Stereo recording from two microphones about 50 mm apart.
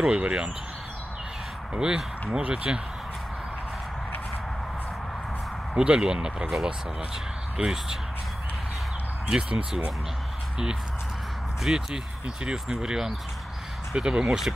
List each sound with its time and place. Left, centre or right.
0.0 s speech: centre
1.8 s speech: centre
2.3 s speech: right
5.8 s speech: centre
7.5 s speech: centre
9.3 s speech: right
11.6 s speech: centre